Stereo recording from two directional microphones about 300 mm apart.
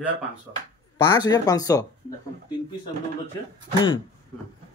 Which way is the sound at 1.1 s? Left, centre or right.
Centre.